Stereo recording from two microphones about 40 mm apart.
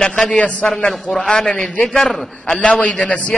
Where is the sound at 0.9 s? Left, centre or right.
Centre.